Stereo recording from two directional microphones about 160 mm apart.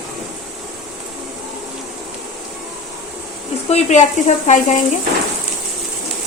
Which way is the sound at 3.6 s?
45° left (ahead or behind).